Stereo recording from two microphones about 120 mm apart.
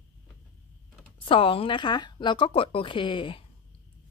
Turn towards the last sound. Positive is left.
turn(degrees=45)  # may be behind; listen again after turning